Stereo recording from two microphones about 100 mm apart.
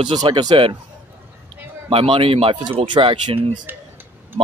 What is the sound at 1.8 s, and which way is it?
Speech, 70° right (ahead or behind).